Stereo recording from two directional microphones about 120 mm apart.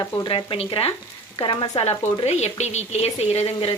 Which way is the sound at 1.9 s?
20° left (ahead or behind).